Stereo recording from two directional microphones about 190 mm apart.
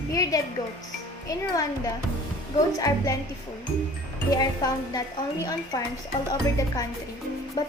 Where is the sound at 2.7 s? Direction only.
20° left (ahead or behind).